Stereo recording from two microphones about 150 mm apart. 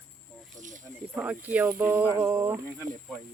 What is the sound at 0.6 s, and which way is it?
Snake, 55° right (ahead or behind).